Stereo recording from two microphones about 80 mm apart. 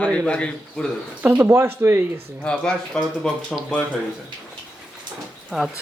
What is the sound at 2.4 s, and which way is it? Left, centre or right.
Speech, centre.